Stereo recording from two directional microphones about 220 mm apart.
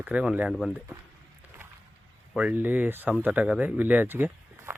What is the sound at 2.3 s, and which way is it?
Speech, 5° right (ahead or behind).